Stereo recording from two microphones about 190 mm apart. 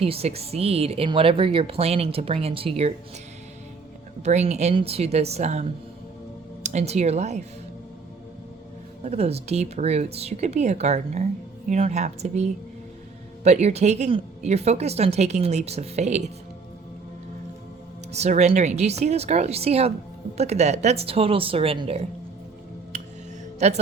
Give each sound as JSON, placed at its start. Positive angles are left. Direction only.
{"t": 0.0, "sound": "speech", "side_deg": -30}
{"t": 4.2, "sound": "speech", "side_deg": -35}
{"t": 9.0, "sound": "speech", "side_deg": -35}
{"t": 18.1, "sound": "speech", "side_deg": -35}
{"t": 23.6, "sound": "speech", "side_deg": -35}